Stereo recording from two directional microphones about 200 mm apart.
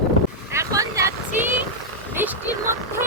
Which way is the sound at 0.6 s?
15° right (ahead or behind).